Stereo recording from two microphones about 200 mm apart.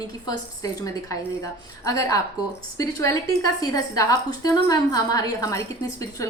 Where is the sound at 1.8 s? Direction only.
15° left (ahead or behind).